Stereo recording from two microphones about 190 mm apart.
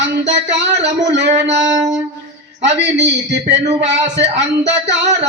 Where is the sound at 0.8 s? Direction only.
65° right (ahead or behind).